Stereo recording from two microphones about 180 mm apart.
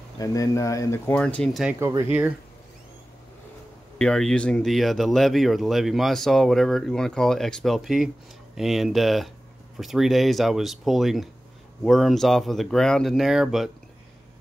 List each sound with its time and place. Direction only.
0.2 s speech: 20° left (ahead or behind); by 1.8 s centre (ahead or behind)
1.8 s speech: 15° right (ahead or behind)
4.0 s speech: 5° left (ahead or behind)